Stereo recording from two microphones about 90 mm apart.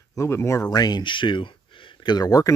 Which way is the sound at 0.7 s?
50° left (ahead or behind).